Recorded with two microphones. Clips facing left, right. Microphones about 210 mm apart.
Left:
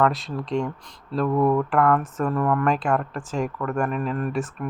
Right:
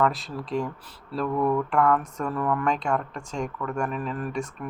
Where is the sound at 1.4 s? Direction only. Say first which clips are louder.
Left 3 dB; 25° left (ahead or behind).